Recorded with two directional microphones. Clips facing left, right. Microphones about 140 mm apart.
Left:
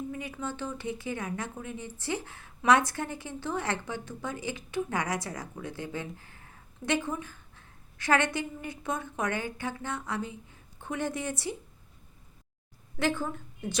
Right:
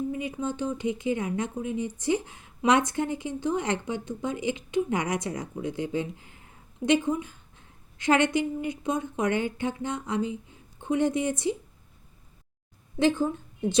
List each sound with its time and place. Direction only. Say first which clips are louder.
0.1 s speech: right 6 dB; 20° right (ahead or behind)
13.0 s a woman's voice: right 6 dB; 20° right (ahead or behind)